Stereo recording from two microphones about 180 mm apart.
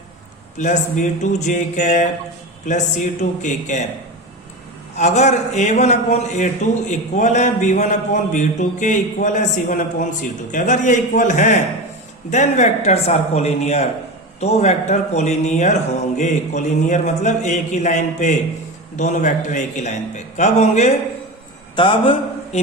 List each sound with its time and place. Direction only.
0.6 s a man's voice: 40° left (ahead or behind)
4.9 s a man's voice: 40° left (ahead or behind)
21.8 s a man's voice: 25° left (ahead or behind)